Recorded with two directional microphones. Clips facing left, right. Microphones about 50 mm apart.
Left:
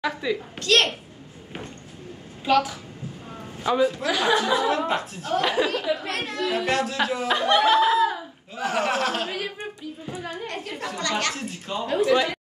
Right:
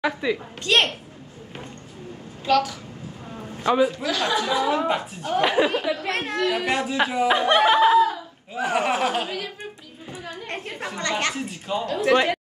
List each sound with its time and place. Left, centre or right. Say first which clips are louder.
0.0 s speech: right 2 dB; centre
2.4 s a woman's voice: even; centre
3.6 s speech: right 2 dB; centre
3.9 s speech: left 2 dB; centre
4.4 s speech: even; centre
6.0 s speech: right 3 dB; right
6.5 s speech: even; centre
10.0 s a sound: left 1 dB; centre
10.4 s a sound: even; right
10.7 s speech: even; centre
11.0 s speech: right 1 dB; right
11.3 s speech: right 3 dB; centre
12.1 s speech: right 3 dB; right